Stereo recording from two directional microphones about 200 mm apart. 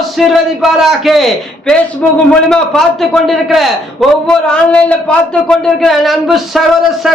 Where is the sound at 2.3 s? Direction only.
5° left (ahead or behind).